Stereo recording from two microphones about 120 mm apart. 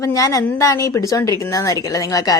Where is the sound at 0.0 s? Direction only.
25° left (ahead or behind).